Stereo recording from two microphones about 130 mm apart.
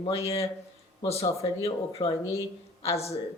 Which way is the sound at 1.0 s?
50° left (ahead or behind).